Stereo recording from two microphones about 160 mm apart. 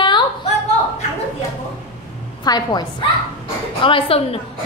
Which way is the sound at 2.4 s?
25° left (ahead or behind).